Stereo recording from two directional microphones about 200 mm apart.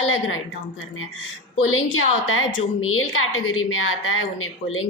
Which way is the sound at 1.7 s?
90° left.